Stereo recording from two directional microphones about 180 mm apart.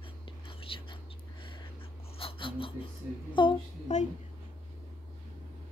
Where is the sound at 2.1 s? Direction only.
30° left (ahead or behind).